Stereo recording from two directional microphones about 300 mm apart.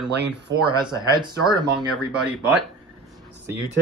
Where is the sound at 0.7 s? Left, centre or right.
Centre.